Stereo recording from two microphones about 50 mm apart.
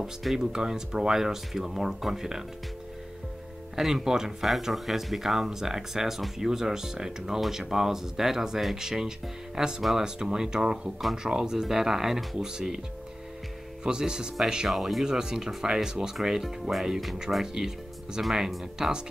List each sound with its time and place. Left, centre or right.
0.0 s speech: centre
3.7 s speech: centre
13.8 s speech: centre
14.7 s speech: centre